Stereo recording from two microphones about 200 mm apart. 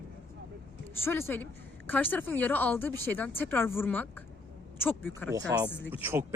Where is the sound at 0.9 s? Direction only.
10° left (ahead or behind).